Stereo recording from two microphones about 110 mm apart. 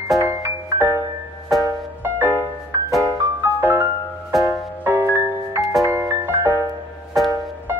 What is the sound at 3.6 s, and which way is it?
Music, 20° right (ahead or behind).